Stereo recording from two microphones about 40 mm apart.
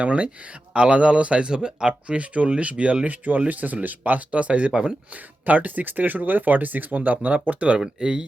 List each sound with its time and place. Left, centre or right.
0.0 s speech: right
1.9 s speech: right
3.2 s speech: right
4.7 s speech: right
5.5 s speech: right
7.9 s speech: right